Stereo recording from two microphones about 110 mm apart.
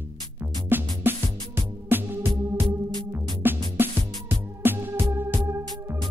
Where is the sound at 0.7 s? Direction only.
20° right (ahead or behind).